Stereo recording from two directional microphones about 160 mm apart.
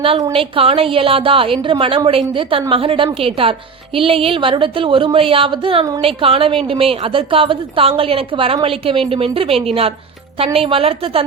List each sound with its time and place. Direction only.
0.3 s a woman's voice: 35° right (ahead or behind)